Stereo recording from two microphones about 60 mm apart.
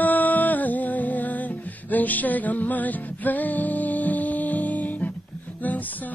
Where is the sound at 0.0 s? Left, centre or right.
Left.